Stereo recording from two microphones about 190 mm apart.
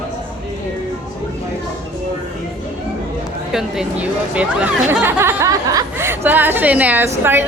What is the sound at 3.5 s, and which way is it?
Speech, centre (ahead or behind).